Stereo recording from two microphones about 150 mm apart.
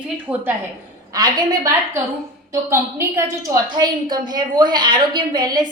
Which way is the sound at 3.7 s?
30° right (ahead or behind).